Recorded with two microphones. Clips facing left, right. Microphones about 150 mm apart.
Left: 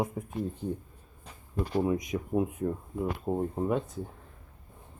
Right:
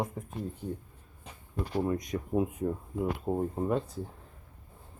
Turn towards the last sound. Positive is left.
turn(degrees=0)  # may be behind; listen again after turning